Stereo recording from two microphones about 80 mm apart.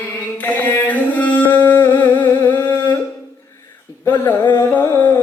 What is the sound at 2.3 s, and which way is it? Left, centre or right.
Humming, left.